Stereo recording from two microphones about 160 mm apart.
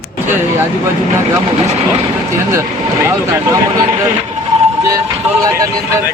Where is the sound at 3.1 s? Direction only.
15° right (ahead or behind).